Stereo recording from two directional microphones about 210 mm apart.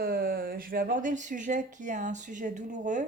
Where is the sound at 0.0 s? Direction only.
45° right (ahead or behind).